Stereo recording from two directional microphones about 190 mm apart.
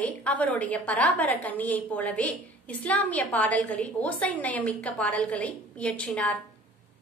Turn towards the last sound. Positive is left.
turn(degrees=5)  # may be behind; listen again after turning